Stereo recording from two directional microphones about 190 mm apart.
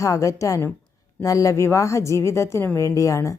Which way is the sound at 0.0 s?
15° left (ahead or behind).